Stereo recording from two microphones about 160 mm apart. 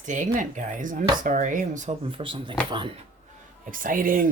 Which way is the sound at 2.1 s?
35° right (ahead or behind).